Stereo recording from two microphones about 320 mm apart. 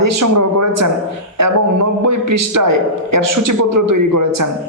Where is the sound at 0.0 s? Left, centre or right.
Right.